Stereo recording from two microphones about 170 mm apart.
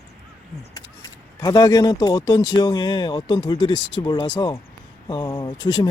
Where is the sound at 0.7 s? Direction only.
20° left (ahead or behind).